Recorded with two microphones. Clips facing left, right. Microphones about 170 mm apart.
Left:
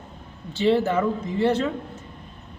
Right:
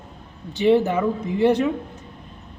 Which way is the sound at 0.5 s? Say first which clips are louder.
Right 3 dB; 15° right (ahead or behind).